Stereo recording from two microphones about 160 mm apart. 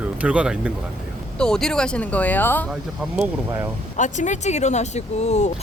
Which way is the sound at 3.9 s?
50° left (ahead or behind).